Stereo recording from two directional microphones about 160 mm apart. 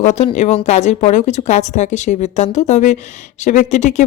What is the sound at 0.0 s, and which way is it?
Speech, 45° left (ahead or behind).